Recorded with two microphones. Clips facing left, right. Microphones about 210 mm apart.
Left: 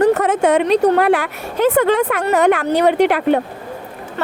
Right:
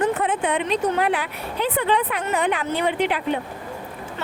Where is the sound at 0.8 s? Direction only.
70° left (ahead or behind).